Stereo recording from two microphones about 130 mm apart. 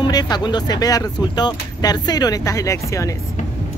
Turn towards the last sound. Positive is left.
turn(degrees=25)  # may be behind; listen again after turning